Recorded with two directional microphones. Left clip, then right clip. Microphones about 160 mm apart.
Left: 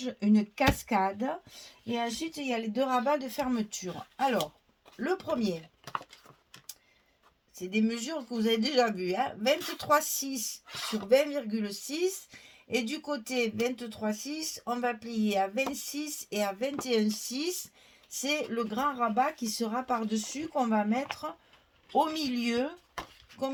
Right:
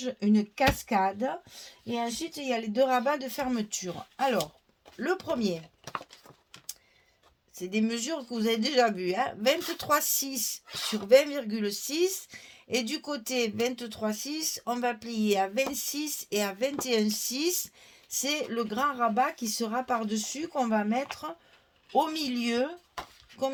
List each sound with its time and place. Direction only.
0.0 s speech: 40° right (ahead or behind)
5.8 s speech: centre (ahead or behind)
7.5 s speech: 55° right (ahead or behind)
10.7 s speech: 5° right (ahead or behind)
11.1 s speech: 55° right (ahead or behind)